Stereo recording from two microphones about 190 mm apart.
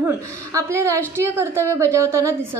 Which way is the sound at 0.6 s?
15° right (ahead or behind).